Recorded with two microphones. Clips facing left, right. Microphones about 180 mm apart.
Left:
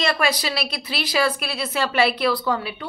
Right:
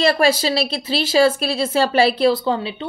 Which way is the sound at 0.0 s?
30° right (ahead or behind).